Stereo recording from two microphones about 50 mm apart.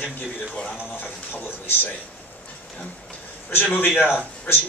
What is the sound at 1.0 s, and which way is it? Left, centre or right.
Speech, left.